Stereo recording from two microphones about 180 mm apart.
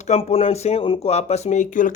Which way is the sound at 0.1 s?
35° left (ahead or behind).